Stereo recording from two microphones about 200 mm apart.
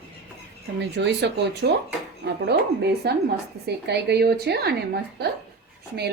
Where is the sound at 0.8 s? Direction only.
60° right (ahead or behind).